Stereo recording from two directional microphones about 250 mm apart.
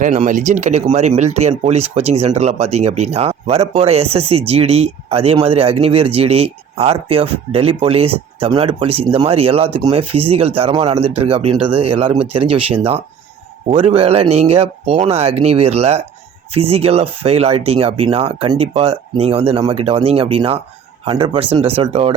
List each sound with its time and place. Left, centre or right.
0.0 s speech: right